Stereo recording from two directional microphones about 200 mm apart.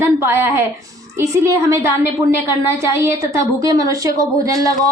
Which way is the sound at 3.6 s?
15° right (ahead or behind).